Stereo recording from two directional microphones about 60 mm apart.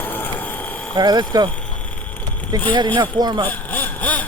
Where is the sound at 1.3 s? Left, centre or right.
Right.